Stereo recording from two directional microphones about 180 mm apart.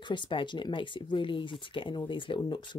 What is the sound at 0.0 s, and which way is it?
Speech, 25° left (ahead or behind).